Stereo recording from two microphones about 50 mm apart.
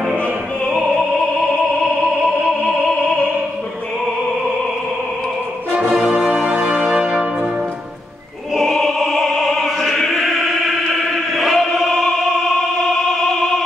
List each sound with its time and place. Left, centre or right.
0.7 s opera: centre
6.0 s music: right
6.3 s music: right
8.6 s opera: centre
11.3 s chant: centre
11.6 s music: centre
13.2 s opera: centre